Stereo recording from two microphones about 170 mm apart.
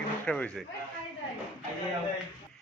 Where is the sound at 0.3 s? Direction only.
5° left (ahead or behind).